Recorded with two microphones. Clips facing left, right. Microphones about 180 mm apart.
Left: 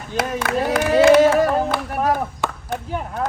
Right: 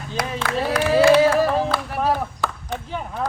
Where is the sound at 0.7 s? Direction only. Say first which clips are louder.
Left 2 dB; 25° left (ahead or behind).